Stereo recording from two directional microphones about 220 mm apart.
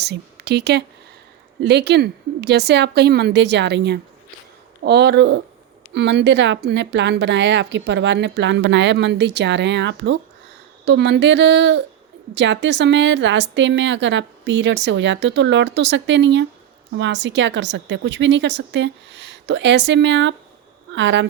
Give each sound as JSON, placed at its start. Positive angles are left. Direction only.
{"t": 0.0, "sound": "a woman's voice", "side_deg": -50}